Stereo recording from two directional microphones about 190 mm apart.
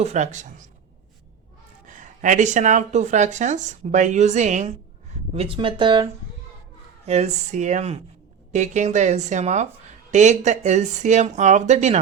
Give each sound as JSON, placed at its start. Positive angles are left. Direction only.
{"t": 0.0, "sound": "speech", "side_deg": -40}
{"t": 1.9, "sound": "speech", "side_deg": -40}
{"t": 7.0, "sound": "speech", "side_deg": -35}